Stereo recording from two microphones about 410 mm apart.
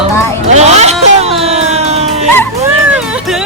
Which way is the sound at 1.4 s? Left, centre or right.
Centre.